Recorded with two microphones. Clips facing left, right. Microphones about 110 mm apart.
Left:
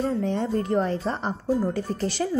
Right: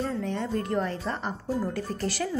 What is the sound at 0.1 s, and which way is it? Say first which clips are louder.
A woman's voice: left 4 dB; 30° left (ahead or behind).